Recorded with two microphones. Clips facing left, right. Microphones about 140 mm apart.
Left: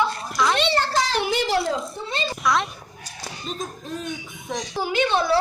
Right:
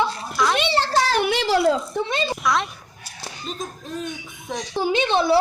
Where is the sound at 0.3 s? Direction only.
Centre (ahead or behind).